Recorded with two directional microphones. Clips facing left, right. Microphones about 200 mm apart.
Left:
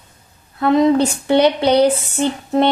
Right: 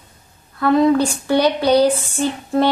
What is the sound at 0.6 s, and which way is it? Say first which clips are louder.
A woman's voice: left 1 dB; 20° left (ahead or behind).